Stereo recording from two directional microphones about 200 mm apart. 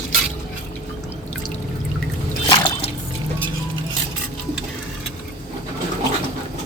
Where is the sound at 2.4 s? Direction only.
25° left (ahead or behind).